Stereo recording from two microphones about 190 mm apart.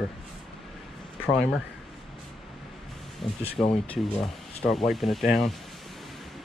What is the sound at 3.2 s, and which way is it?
Speech, centre (ahead or behind).